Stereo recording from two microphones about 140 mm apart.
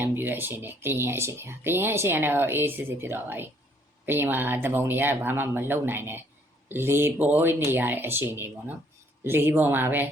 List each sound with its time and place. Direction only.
0.0 s speech: 15° right (ahead or behind)